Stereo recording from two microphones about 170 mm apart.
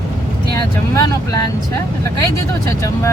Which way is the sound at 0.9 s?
20° left (ahead or behind).